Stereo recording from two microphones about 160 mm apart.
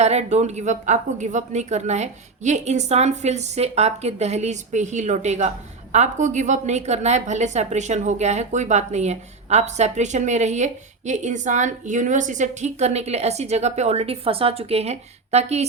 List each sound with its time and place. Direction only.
0.0 s a woman's voice: 45° right (ahead or behind)